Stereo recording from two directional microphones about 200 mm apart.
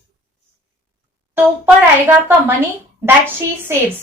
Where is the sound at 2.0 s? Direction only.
10° right (ahead or behind).